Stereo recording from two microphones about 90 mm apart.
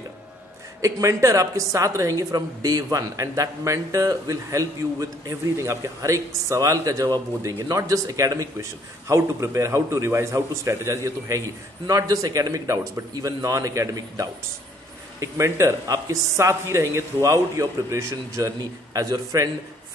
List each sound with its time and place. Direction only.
0.7 s speech: 35° right (ahead or behind)